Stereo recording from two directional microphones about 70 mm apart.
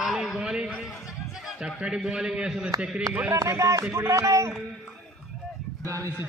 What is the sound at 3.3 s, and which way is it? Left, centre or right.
Speech, right.